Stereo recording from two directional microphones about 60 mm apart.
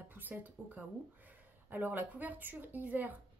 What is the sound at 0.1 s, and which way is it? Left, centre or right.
A woman's voice, right.